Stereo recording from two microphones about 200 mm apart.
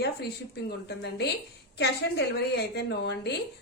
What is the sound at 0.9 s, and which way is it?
A woman's voice, 55° left (ahead or behind).